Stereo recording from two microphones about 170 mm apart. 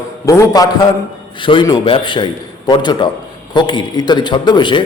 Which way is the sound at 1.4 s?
30° left (ahead or behind).